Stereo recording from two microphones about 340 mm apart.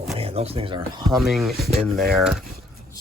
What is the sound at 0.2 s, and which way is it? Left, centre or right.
Speech, centre.